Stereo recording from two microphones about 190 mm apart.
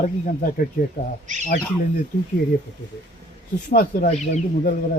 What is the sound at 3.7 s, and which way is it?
Speech, 50° left (ahead or behind).